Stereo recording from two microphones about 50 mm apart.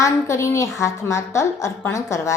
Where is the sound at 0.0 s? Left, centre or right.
Left.